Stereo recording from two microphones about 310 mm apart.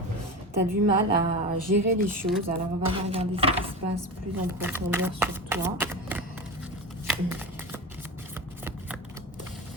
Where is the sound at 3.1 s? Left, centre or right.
Centre.